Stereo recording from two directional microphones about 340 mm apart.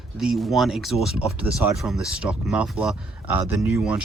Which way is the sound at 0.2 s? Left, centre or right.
Centre.